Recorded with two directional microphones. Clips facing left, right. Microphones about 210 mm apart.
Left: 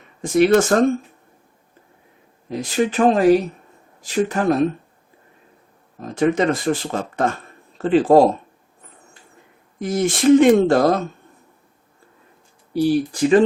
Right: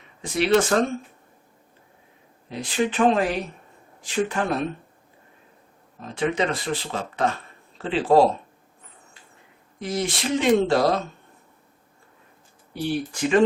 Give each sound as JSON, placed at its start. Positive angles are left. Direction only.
{"t": 0.2, "sound": "speech", "side_deg": 45}
{"t": 2.5, "sound": "speech", "side_deg": 40}
{"t": 6.0, "sound": "speech", "side_deg": 45}
{"t": 9.7, "sound": "speech", "side_deg": 50}
{"t": 12.7, "sound": "speech", "side_deg": 35}